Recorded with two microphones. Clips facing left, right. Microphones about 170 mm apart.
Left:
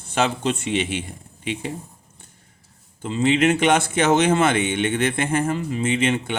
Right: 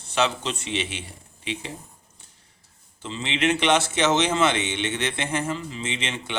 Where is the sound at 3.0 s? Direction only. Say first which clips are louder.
Left 7 dB; 45° left (ahead or behind).